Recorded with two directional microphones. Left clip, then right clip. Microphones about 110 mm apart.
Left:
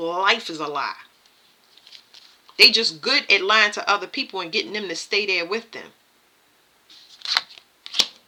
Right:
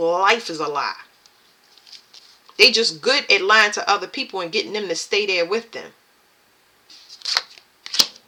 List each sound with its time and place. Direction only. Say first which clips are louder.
0.0 s speech: right 3 dB; 25° left (ahead or behind)
7.2 s shuffling cards: even; 25° left (ahead or behind)
7.5 s shuffling cards: right 3 dB; centre (ahead or behind)